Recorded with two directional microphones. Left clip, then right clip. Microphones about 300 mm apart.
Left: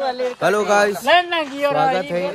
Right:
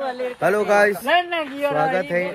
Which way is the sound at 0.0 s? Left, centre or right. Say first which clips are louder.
Left 4 dB; left.